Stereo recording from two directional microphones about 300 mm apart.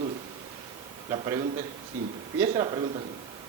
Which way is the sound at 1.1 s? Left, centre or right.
Centre.